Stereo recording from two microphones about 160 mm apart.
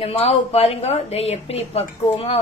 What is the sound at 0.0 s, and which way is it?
A woman's voice, 40° left (ahead or behind).